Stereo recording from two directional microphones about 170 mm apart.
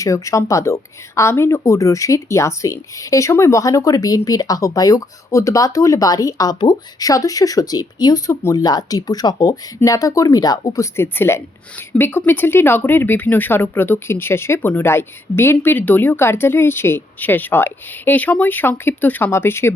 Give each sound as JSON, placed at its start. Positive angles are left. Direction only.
{"t": 0.0, "sound": "speech", "side_deg": 20}